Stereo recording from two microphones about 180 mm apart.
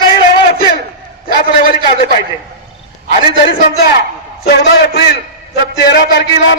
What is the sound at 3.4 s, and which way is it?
A man's voice, 60° left (ahead or behind).